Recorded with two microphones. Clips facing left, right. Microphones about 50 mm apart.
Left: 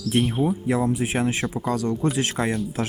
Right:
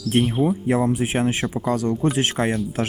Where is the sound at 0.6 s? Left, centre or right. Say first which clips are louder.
Right 2 dB; right.